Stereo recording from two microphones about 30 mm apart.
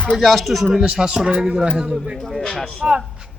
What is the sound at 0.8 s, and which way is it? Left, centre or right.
Speech, right.